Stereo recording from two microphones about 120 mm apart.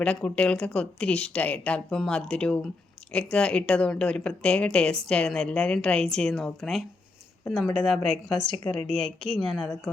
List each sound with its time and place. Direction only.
0.0 s a woman's voice: 10° left (ahead or behind)